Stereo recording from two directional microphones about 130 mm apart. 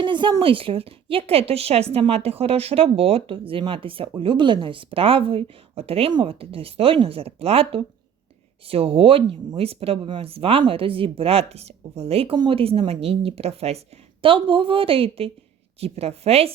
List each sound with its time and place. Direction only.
0.0 s a woman's voice: 40° right (ahead or behind)